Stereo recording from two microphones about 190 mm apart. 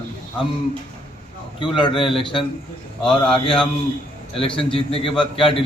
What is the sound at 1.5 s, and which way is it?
Speech, 25° left (ahead or behind).